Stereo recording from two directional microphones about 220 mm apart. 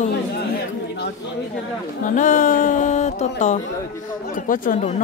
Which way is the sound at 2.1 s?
35° left (ahead or behind).